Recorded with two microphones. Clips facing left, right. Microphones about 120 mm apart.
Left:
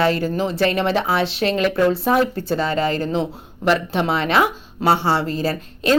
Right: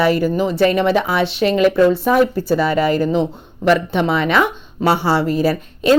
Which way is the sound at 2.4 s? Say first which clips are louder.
Right 4 dB; 25° left (ahead or behind).